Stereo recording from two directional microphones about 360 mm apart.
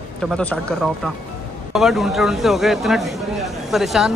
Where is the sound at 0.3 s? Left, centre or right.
Centre.